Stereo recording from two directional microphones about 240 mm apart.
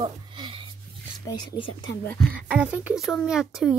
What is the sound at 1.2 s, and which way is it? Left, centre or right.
Speech, centre.